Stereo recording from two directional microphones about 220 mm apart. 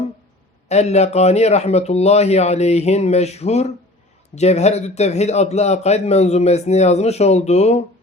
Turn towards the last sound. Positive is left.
turn(degrees=30)  # may be behind; listen again after turning